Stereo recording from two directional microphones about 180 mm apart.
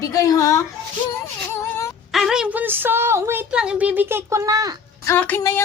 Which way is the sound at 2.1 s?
Centre (ahead or behind).